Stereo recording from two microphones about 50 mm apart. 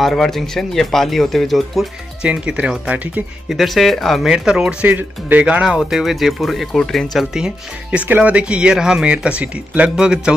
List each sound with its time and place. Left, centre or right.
0.0 s speech: centre
2.2 s speech: right
3.4 s speech: centre
4.2 s speech: centre
4.8 s speech: right
5.4 s speech: right
5.8 s speech: centre
7.3 s speech: centre
8.0 s speech: right